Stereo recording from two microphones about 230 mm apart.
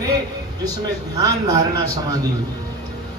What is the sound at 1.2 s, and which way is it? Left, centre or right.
A man's voice, centre.